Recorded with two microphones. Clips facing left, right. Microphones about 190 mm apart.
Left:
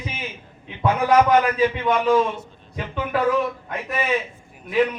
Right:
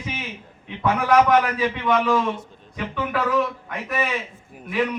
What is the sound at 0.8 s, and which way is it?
A man's voice, 25° left (ahead or behind).